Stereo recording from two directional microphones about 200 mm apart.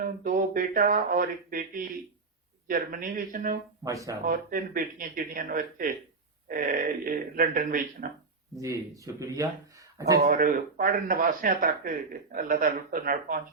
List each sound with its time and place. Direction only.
0.0 s speech: 45° right (ahead or behind)
3.8 s speech: 15° right (ahead or behind)
4.3 s speech: 40° right (ahead or behind)
9.1 s speech: 15° right (ahead or behind)
10.2 s speech: 40° right (ahead or behind)